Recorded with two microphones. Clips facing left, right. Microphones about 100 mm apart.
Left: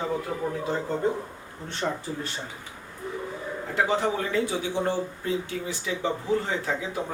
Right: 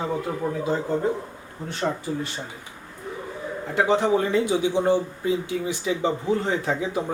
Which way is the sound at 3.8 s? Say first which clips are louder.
Right 8 dB; 20° right (ahead or behind).